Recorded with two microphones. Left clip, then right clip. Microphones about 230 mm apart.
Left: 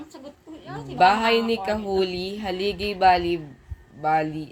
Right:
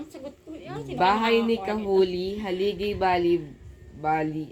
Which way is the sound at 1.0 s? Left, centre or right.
Left.